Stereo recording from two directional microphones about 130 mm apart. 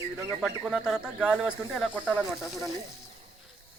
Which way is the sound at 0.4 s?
5° right (ahead or behind).